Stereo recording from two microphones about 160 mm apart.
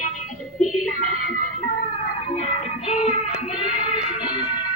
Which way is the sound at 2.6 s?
40° left (ahead or behind).